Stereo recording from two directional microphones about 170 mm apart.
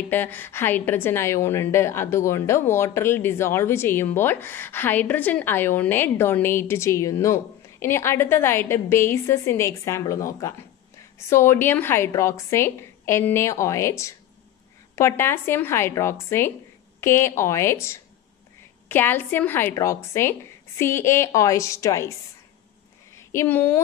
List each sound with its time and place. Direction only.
0.1 s a woman's voice: 10° left (ahead or behind)
23.1 s speech: 15° left (ahead or behind)